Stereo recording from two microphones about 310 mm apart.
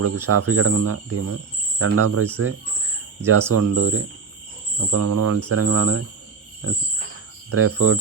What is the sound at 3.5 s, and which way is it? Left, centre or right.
Speech, right.